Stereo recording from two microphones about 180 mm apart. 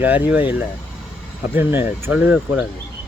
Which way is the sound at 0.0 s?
10° right (ahead or behind).